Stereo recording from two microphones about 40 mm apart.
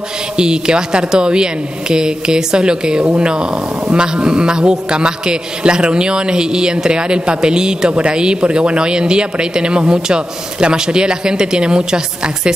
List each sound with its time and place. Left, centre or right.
0.4 s speech: centre